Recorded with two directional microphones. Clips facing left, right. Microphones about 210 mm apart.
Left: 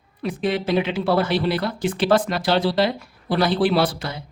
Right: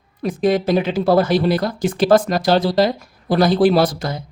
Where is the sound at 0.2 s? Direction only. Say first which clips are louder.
Right 6 dB; 40° right (ahead or behind).